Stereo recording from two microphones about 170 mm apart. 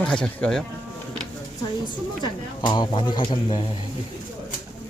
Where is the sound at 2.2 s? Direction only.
25° left (ahead or behind).